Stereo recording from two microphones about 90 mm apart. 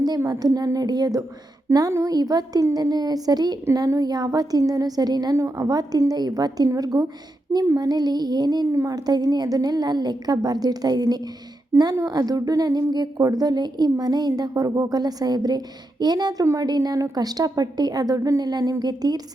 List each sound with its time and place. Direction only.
0.3 s speech: 45° right (ahead or behind)
8.7 s speech: 30° right (ahead or behind)
9.0 s speech: 45° right (ahead or behind)